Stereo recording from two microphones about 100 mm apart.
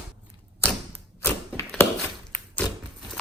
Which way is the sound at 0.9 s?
25° left (ahead or behind).